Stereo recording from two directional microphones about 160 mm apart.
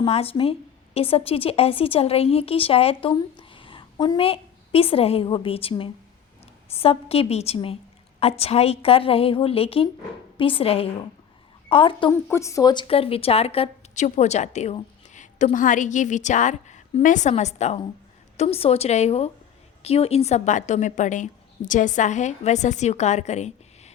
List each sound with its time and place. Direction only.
0.0 s speech: 35° left (ahead or behind)
12.1 s speech: 15° left (ahead or behind); by 23.9 s 45° left (ahead or behind)